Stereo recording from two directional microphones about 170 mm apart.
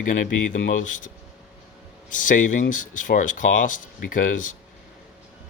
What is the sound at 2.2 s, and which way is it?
Speech, 50° left (ahead or behind).